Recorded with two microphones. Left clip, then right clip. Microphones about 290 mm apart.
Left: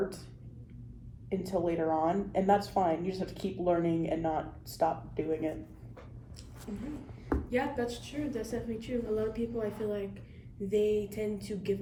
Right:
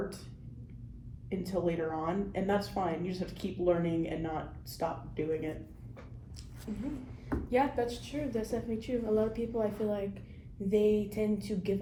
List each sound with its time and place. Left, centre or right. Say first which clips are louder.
1.3 s speech: left 2 dB; centre
7.5 s a woman's voice: right 4 dB; centre